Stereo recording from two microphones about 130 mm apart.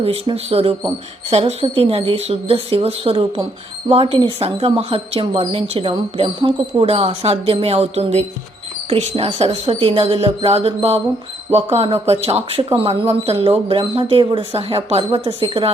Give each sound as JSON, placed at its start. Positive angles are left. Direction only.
{"t": 0.0, "sound": "speech", "side_deg": -50}